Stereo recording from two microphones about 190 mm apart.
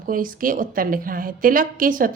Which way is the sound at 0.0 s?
45° right (ahead or behind).